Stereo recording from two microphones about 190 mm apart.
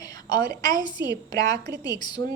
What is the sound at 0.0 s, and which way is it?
A woman's voice, 20° left (ahead or behind).